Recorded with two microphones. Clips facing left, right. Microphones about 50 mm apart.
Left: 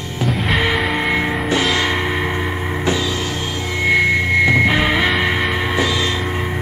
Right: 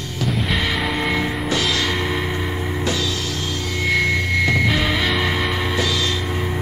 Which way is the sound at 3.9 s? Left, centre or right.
Centre.